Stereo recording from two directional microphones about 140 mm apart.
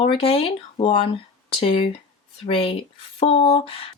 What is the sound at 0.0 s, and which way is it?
Speech, 45° left (ahead or behind).